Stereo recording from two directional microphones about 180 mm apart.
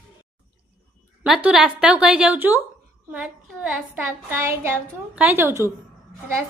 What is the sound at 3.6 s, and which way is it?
Speech, 10° right (ahead or behind).